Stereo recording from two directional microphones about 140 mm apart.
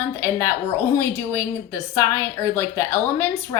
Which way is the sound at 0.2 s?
20° left (ahead or behind).